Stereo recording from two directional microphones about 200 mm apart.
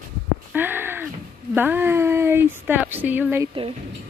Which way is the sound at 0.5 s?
10° right (ahead or behind).